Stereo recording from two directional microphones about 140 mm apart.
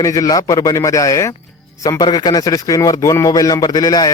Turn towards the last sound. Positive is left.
turn(degrees=25)  # may be behind; listen again after turning